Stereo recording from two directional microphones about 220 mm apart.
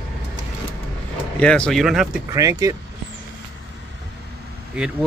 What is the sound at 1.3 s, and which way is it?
Speech, 5° left (ahead or behind).